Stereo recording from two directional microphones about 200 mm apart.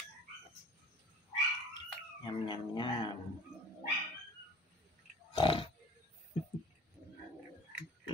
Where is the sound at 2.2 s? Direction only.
25° left (ahead or behind).